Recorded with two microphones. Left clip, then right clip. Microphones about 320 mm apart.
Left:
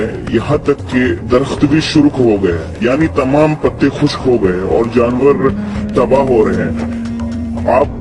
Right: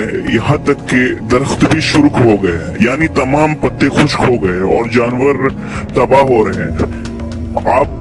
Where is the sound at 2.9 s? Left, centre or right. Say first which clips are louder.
Left 2 dB; right.